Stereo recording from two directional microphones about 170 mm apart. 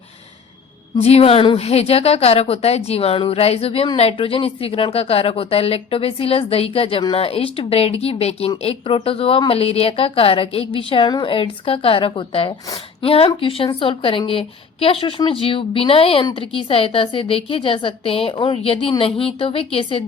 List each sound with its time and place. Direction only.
1.0 s a woman's voice: 35° left (ahead or behind)